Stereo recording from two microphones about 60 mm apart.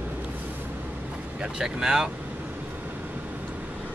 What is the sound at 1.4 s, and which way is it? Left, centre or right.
Speech, centre.